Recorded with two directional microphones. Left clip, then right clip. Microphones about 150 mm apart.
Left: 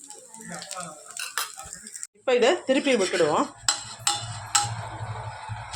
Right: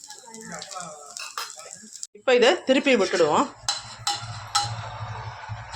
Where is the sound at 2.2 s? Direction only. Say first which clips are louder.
Right 3 dB; 10° right (ahead or behind).